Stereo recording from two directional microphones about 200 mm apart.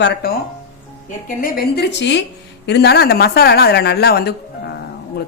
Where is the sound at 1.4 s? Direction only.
50° left (ahead or behind).